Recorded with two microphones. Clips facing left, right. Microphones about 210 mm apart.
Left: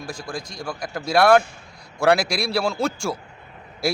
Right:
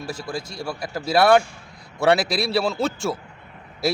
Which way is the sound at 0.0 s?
5° right (ahead or behind).